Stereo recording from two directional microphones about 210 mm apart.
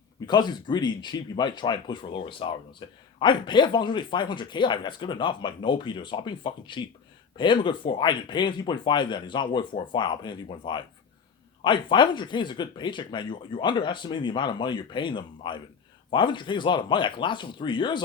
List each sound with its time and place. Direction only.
0.3 s speech: 20° left (ahead or behind)